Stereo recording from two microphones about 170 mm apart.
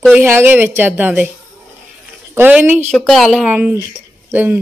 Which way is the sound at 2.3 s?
10° right (ahead or behind).